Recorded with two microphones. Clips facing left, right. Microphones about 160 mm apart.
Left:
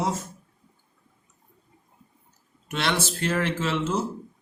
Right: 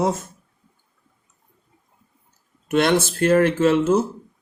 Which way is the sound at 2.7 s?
50° right (ahead or behind).